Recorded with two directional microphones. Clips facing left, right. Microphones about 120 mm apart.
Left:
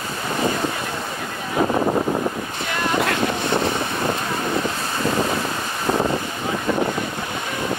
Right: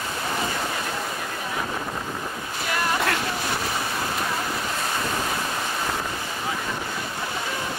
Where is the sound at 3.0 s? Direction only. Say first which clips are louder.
Left 4 dB; 25° left (ahead or behind).